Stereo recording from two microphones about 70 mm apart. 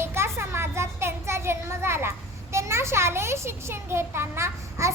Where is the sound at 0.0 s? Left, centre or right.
Right.